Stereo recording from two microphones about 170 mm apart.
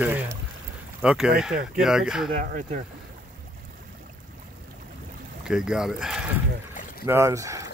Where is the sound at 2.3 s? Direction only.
50° right (ahead or behind).